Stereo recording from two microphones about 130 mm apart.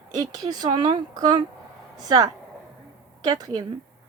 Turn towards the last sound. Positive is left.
turn(degrees=-30)  # may be behind; listen again after turning